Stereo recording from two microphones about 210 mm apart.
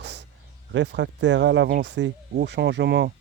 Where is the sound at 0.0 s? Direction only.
55° right (ahead or behind).